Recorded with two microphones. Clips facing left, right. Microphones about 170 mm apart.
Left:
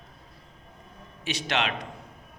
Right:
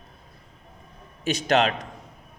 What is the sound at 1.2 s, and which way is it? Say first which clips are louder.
Speech: right 7 dB; 45° right (ahead or behind).